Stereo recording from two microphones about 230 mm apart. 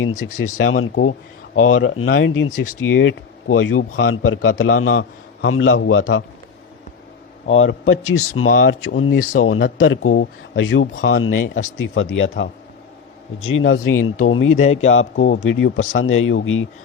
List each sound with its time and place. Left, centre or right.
0.5 s a man's voice: left
8.1 s speech: left
8.4 s a man's voice: left
9.1 s speech: left
9.4 s a man's voice: left
14.5 s speech: left
14.8 s a man's voice: left